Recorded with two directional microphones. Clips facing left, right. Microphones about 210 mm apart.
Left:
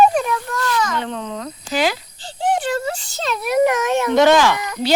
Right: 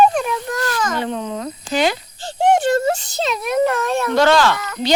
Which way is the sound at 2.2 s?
45° right (ahead or behind).